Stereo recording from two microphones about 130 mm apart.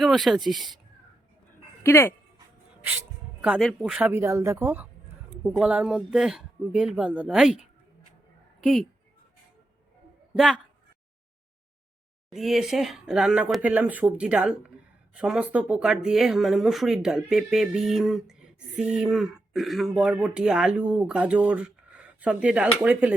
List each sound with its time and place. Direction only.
0.0 s speech: centre (ahead or behind)
1.8 s speech: 20° left (ahead or behind)
3.6 s speech: centre (ahead or behind)
4.1 s speech: 20° right (ahead or behind); by 8.9 s centre (ahead or behind)
10.3 s a woman's voice: centre (ahead or behind)
12.3 s speech: centre (ahead or behind)